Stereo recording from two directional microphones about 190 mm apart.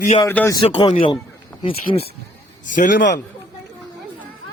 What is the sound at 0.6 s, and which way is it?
Speech, 25° left (ahead or behind).